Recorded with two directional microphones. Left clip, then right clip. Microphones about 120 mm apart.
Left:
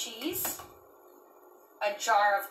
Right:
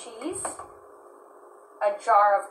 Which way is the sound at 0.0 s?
20° left (ahead or behind).